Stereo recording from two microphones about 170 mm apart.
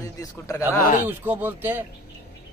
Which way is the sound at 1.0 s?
10° right (ahead or behind).